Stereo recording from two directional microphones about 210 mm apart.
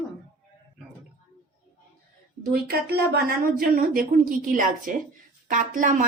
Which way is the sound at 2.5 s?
50° right (ahead or behind).